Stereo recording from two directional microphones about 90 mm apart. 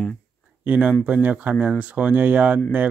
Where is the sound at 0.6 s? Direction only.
20° right (ahead or behind).